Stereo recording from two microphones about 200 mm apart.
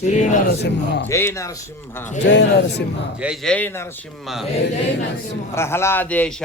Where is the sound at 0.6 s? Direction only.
60° left (ahead or behind).